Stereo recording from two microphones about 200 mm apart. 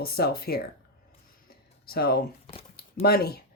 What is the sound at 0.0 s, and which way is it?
Speech, 50° left (ahead or behind).